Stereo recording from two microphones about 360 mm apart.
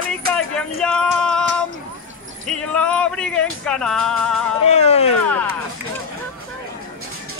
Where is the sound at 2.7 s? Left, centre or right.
Centre.